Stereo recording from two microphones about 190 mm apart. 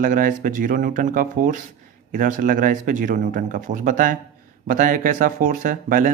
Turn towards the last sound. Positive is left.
turn(degrees=-45)  # may be behind; listen again after turning